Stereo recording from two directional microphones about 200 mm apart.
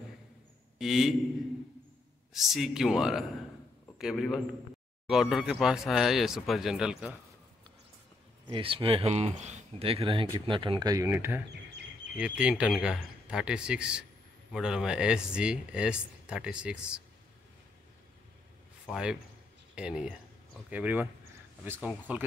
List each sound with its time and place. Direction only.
0.7 s speech: centre (ahead or behind)
2.3 s speech: centre (ahead or behind)
8.5 s speech: 25° right (ahead or behind); by 17.0 s 5° right (ahead or behind)
18.9 s speech: 5° right (ahead or behind)